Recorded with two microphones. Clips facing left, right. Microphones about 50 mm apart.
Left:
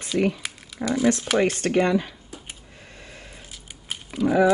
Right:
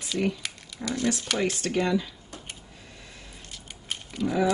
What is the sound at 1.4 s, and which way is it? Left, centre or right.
Speech, left.